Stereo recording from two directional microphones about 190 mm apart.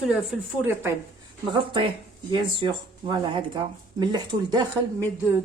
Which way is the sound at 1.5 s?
25° right (ahead or behind).